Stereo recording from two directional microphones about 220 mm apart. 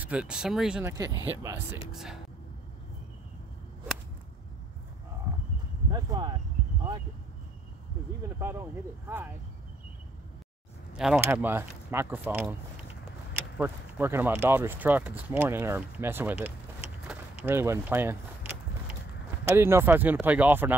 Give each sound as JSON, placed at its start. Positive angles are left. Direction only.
{"t": 0.0, "sound": "speech", "side_deg": -5}
{"t": 1.9, "sound": "speech", "side_deg": 0}
{"t": 5.9, "sound": "speech", "side_deg": -20}
{"t": 8.4, "sound": "speech", "side_deg": -10}
{"t": 10.9, "sound": "speech", "side_deg": -5}
{"t": 13.6, "sound": "speech", "side_deg": -10}
{"t": 17.5, "sound": "a sound", "side_deg": -10}
{"t": 19.4, "sound": "speech", "side_deg": -10}